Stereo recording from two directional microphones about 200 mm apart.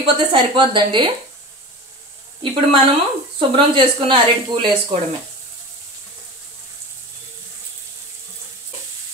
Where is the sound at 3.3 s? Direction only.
25° right (ahead or behind).